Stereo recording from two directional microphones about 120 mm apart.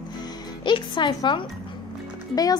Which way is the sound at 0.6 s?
40° left (ahead or behind).